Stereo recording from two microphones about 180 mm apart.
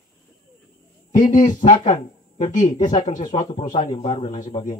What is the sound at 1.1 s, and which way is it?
Speech, 45° left (ahead or behind).